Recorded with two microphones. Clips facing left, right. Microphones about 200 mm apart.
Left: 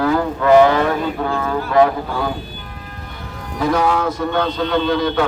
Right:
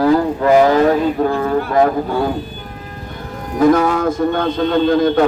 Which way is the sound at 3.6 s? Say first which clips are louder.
Right 5 dB; 50° right (ahead or behind).